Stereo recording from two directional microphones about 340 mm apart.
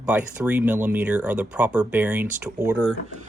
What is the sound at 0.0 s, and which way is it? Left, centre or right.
Speech, centre.